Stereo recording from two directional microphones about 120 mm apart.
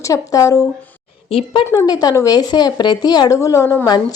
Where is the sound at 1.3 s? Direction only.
45° left (ahead or behind).